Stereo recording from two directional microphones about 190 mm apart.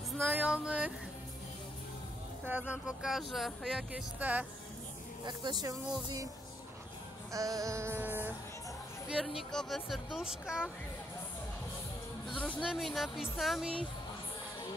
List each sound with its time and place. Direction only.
0.3 s music: 5° right (ahead or behind)
2.4 s speech: 10° right (ahead or behind)
5.2 s speech: 20° right (ahead or behind)
7.3 s music: 15° right (ahead or behind)
9.1 s speech: centre (ahead or behind)
12.3 s speech: 5° left (ahead or behind)